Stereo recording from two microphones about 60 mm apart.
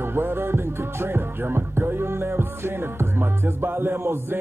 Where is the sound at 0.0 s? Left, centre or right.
Right.